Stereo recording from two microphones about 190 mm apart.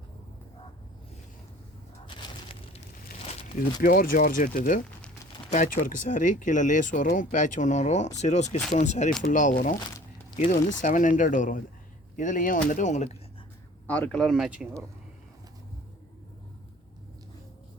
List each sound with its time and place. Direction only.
2.0 s a sound: 25° left (ahead or behind)
3.6 s speech: 45° left (ahead or behind)
13.8 s speech: 5° left (ahead or behind)